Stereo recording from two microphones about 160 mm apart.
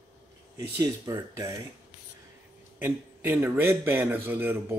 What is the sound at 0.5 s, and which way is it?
Speech, 20° right (ahead or behind).